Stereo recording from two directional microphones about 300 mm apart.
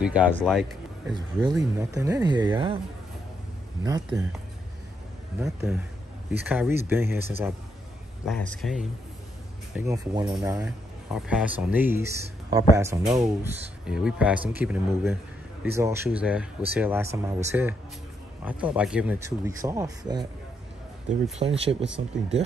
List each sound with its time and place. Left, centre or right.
0.0 s speech: centre
1.1 s speech: centre
5.4 s speech: centre
9.8 s speech: centre